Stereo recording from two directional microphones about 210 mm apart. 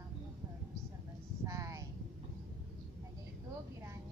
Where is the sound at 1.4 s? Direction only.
15° right (ahead or behind).